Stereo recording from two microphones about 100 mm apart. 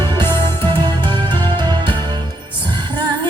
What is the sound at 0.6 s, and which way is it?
Music, 20° left (ahead or behind).